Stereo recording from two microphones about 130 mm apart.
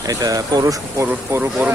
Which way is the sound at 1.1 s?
10° right (ahead or behind).